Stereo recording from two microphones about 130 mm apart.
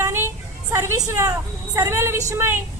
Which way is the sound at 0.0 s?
15° right (ahead or behind).